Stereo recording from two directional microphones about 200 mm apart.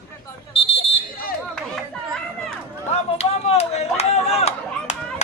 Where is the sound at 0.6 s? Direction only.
30° left (ahead or behind).